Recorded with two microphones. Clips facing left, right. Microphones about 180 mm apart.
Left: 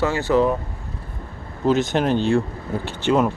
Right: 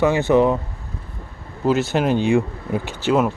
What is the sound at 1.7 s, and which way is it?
Speech, 5° right (ahead or behind).